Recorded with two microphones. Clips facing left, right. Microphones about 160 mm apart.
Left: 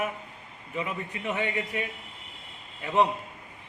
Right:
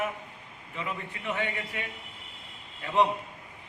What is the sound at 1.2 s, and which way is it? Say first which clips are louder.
Speech: left 2 dB; 20° left (ahead or behind).